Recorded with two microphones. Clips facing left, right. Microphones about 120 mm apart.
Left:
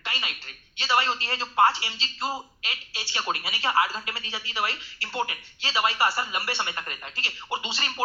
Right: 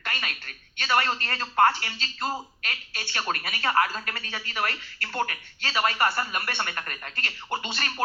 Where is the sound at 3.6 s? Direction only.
15° left (ahead or behind).